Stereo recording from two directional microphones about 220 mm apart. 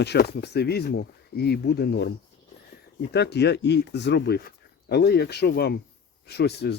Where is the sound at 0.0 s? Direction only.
50° left (ahead or behind).